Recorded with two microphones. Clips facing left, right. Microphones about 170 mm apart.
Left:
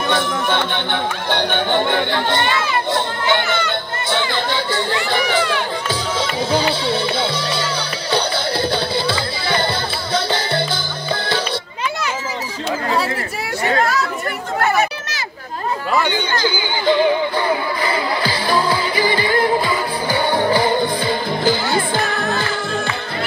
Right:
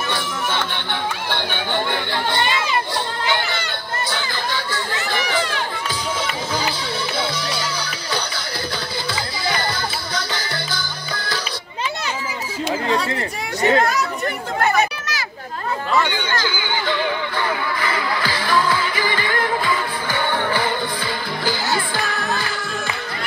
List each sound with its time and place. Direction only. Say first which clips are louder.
1.7 s chatter: left 4 dB; 20° left (ahead or behind)
2.0 s speech: left 3 dB; 20° left (ahead or behind)
2.9 s crowd: left 4 dB; 20° left (ahead or behind)
6.9 s music: left 5 dB; 25° left (ahead or behind)
13.6 s chatter: right 2 dB; 20° right (ahead or behind)
16.3 s music: left 3 dB; 15° left (ahead or behind); by 20.7 s 35° left (ahead or behind)
20.7 s music: left 6 dB; 20° left (ahead or behind)